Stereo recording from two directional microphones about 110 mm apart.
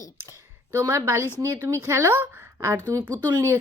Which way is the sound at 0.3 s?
25° right (ahead or behind).